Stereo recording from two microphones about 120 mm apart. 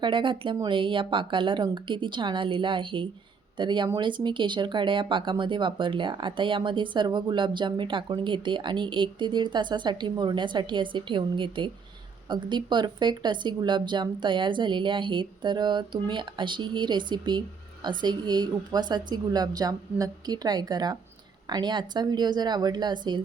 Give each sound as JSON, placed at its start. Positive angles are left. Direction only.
{"t": 0.0, "sound": "speech", "side_deg": -45}